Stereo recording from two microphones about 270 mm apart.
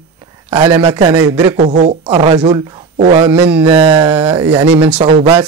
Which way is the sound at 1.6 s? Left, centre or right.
Right.